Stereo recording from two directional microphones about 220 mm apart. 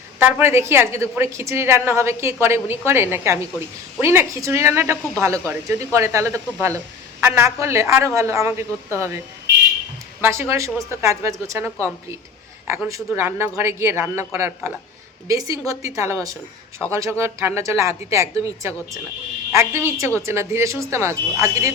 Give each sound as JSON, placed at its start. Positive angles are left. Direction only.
{"t": 0.2, "sound": "speech", "side_deg": -10}